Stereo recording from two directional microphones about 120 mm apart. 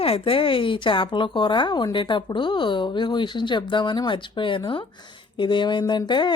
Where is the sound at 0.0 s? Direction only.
50° left (ahead or behind).